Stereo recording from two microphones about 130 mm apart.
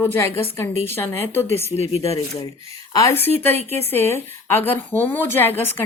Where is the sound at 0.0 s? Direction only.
20° left (ahead or behind).